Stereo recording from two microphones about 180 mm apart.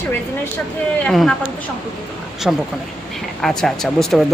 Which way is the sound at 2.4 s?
Centre (ahead or behind).